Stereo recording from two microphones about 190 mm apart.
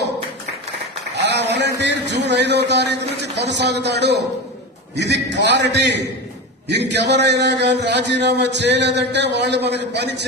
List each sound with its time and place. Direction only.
1.1 s a sound: 65° right (ahead or behind)
1.8 s a man's voice: 65° right (ahead or behind)
6.9 s a man's voice: 65° right (ahead or behind)